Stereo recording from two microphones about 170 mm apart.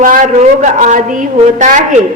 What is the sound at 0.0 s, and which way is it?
A woman's voice, 50° right (ahead or behind).